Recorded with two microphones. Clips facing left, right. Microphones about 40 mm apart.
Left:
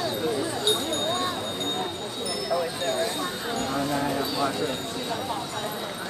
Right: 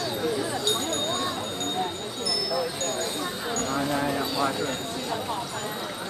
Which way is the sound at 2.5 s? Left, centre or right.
Left.